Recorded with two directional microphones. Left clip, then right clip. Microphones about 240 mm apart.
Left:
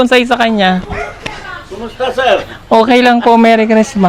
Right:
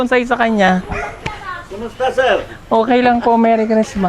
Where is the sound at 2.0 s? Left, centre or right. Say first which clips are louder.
Left 3 dB; centre.